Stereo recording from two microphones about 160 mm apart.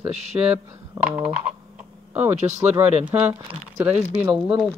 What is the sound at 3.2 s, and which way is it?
Speech, 30° right (ahead or behind).